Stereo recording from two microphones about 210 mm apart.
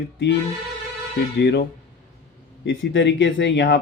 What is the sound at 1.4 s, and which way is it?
Speech, 55° left (ahead or behind).